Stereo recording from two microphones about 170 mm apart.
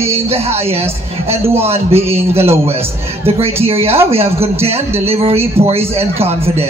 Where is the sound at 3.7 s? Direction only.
35° right (ahead or behind).